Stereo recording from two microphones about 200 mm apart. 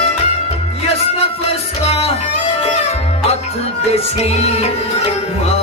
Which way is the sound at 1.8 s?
30° left (ahead or behind).